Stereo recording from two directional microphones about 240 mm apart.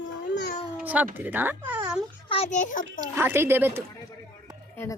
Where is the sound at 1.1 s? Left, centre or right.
Centre.